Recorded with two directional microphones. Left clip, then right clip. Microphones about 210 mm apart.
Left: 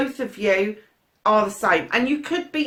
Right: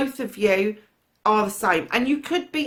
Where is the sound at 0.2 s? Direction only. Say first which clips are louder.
Even; 50° right (ahead or behind).